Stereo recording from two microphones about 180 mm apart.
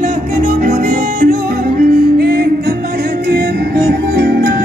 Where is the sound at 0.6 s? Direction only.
50° right (ahead or behind).